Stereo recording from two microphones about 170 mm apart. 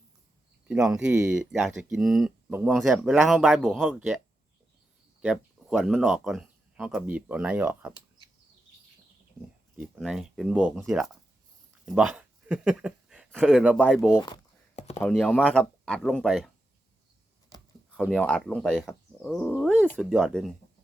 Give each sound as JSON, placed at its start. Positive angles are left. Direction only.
{"t": 0.7, "sound": "speech", "side_deg": -5}
{"t": 3.8, "sound": "speech", "side_deg": -10}
{"t": 5.2, "sound": "speech", "side_deg": 0}
{"t": 9.7, "sound": "speech", "side_deg": -5}
{"t": 14.8, "sound": "chopping", "side_deg": 40}
{"t": 15.1, "sound": "speech", "side_deg": 5}
{"t": 17.9, "sound": "speech", "side_deg": 5}